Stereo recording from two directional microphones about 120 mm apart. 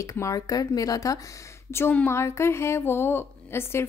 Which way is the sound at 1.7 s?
20° left (ahead or behind).